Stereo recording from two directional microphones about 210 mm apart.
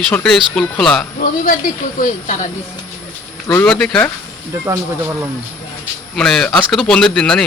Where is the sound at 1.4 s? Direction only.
40° left (ahead or behind).